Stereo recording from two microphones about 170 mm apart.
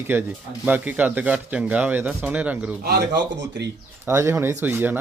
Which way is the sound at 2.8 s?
80° right.